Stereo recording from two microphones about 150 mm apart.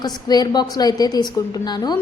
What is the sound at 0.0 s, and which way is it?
A woman's voice, 25° left (ahead or behind).